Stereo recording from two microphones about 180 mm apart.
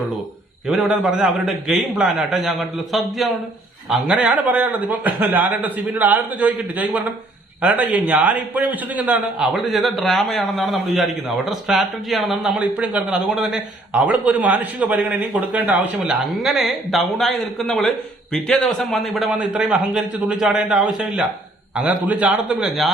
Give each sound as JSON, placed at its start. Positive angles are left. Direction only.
{"t": 0.7, "sound": "a man's voice", "side_deg": -5}